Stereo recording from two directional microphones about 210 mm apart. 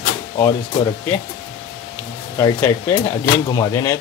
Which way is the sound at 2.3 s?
15° left (ahead or behind).